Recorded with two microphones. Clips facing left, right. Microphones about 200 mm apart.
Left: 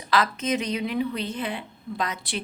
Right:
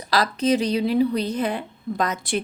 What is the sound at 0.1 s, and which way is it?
A woman's voice, 35° right (ahead or behind).